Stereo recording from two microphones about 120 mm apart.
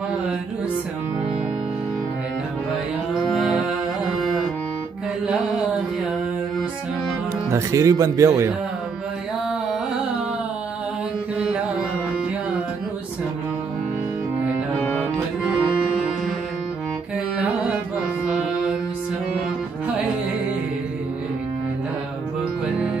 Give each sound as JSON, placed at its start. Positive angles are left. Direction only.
{"t": 3.3, "sound": "mantra", "side_deg": 0}
{"t": 5.2, "sound": "mantra", "side_deg": -5}
{"t": 7.5, "sound": "speech", "side_deg": -25}
{"t": 14.7, "sound": "music", "side_deg": 15}
{"t": 18.2, "sound": "music", "side_deg": -5}